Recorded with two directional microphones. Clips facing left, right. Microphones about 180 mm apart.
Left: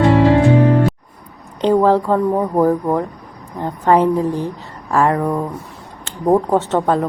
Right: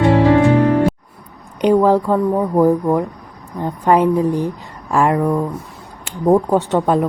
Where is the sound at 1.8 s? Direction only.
10° right (ahead or behind).